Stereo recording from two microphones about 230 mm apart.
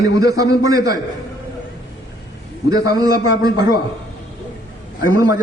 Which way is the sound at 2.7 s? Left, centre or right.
Centre.